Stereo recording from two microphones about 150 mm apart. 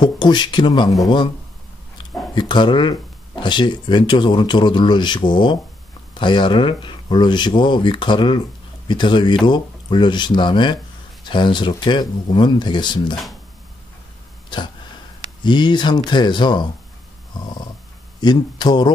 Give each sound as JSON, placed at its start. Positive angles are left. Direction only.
{"t": 0.0, "sound": "speech", "side_deg": 30}
{"t": 2.3, "sound": "speech", "side_deg": 30}
{"t": 14.5, "sound": "speech", "side_deg": 30}
{"t": 18.2, "sound": "speech", "side_deg": 30}